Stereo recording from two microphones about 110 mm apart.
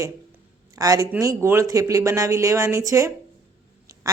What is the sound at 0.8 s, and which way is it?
Speech, 30° right (ahead or behind).